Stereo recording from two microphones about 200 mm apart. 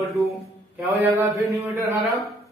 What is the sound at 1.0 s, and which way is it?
Speech, 15° right (ahead or behind).